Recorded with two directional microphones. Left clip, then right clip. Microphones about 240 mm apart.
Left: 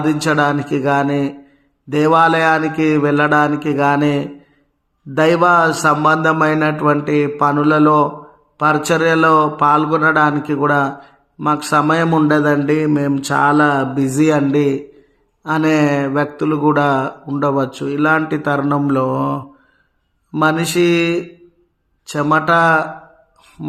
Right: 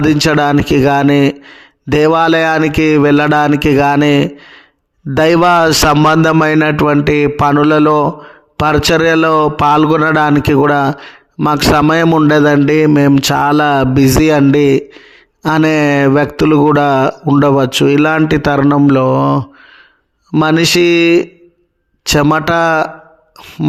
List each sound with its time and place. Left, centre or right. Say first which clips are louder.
0.0 s speech: right 4 dB; right